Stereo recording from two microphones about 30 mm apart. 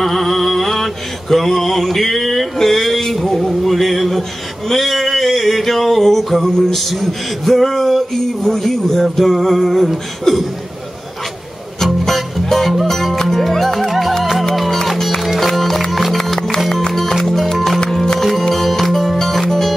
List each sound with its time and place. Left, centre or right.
0.0 s mantra: centre
3.2 s a sound: centre
8.5 s speech: centre
9.1 s a sound: centre
10.3 s speech: centre
11.8 s music: centre
13.8 s music: centre
17.8 s music: centre